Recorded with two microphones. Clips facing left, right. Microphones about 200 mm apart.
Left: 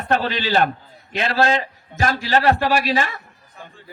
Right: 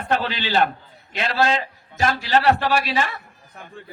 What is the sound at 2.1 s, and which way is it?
Speech, 45° left (ahead or behind).